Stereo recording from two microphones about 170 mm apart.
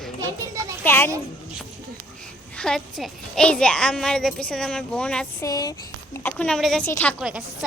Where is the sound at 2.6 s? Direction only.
Centre (ahead or behind).